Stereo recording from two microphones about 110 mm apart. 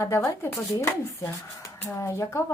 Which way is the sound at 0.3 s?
25° left (ahead or behind).